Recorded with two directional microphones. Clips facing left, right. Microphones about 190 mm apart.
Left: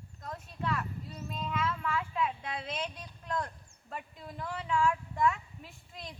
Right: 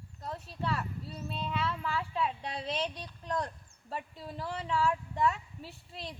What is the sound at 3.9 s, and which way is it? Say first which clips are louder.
A woman's voice: right 3 dB; 30° right (ahead or behind).